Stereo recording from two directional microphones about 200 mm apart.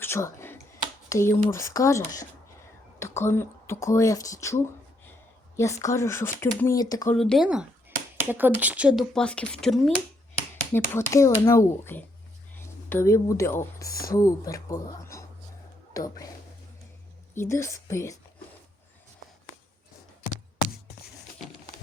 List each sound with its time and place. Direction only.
0.0 s computer keyboard: 15° left (ahead or behind)
1.1 s speech: 15° left (ahead or behind)
7.2 s speech: centre (ahead or behind)
10.7 s speech: 10° left (ahead or behind)
17.3 s speech: 15° left (ahead or behind)